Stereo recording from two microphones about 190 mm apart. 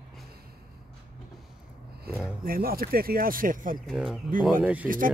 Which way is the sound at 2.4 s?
50° right (ahead or behind).